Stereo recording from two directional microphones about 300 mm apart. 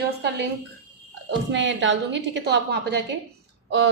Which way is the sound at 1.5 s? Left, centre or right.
Right.